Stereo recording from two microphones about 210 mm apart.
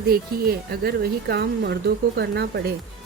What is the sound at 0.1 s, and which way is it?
Speech, 45° right (ahead or behind).